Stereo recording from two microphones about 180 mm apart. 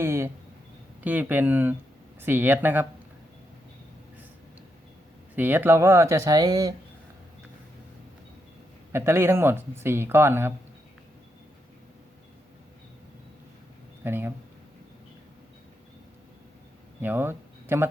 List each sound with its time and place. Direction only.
0.0 s speech: 15° right (ahead or behind)
5.4 s speech: 10° right (ahead or behind)
8.9 s speech: 15° right (ahead or behind)
14.0 s speech: 10° right (ahead or behind)
17.0 s speech: 10° right (ahead or behind)